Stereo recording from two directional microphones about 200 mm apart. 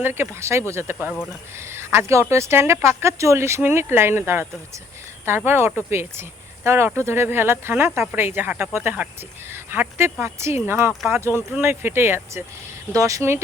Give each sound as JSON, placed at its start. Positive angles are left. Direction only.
{"t": 0.0, "sound": "speech", "side_deg": -10}
{"t": 5.5, "sound": "speech", "side_deg": -10}